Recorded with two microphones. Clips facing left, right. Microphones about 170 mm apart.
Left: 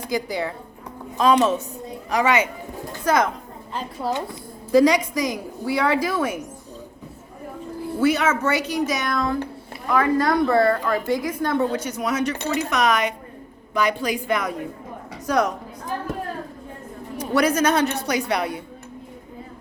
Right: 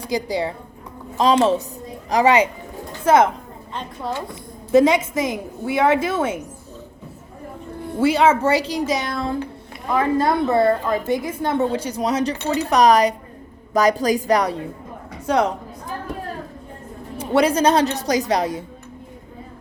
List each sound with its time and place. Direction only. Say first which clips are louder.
0.1 s a woman's voice: right 3 dB; 30° right (ahead or behind)
4.7 s a woman's voice: right 1 dB; 25° right (ahead or behind)
7.9 s a woman's voice: right 4 dB; 30° right (ahead or behind)
17.2 s a woman's voice: right 2 dB; 30° right (ahead or behind)